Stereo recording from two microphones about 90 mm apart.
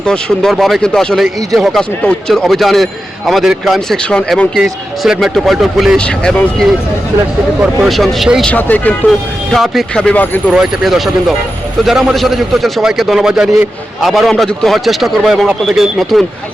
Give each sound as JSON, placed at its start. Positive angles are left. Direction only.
{"t": 0.0, "sound": "a man's voice", "side_deg": 10}
{"t": 4.5, "sound": "a man's voice", "side_deg": 0}
{"t": 6.0, "sound": "speech", "side_deg": 10}
{"t": 7.9, "sound": "a man's voice", "side_deg": 0}
{"t": 8.4, "sound": "speech", "side_deg": 20}
{"t": 9.5, "sound": "a man's voice", "side_deg": 0}
{"t": 9.9, "sound": "speech", "side_deg": 10}
{"t": 10.5, "sound": "a man's voice", "side_deg": -5}